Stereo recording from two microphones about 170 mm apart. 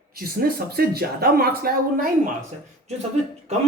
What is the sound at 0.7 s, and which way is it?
Speech, 65° right (ahead or behind).